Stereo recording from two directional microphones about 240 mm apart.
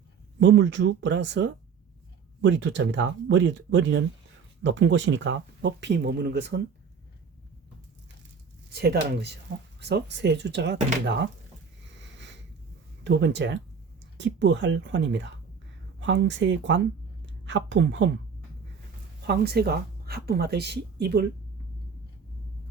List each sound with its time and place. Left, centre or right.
0.3 s speech: right
8.7 s speech: right
11.9 s sniff: right
13.1 s speech: right
19.3 s speech: right